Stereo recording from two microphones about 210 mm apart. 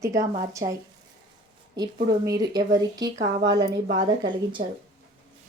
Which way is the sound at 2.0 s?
15° right (ahead or behind).